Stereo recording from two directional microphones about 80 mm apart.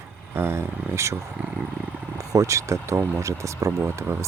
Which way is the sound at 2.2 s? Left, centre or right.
Right.